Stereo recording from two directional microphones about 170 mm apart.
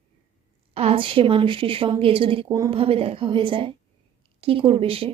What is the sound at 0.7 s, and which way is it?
A woman's voice, 35° right (ahead or behind).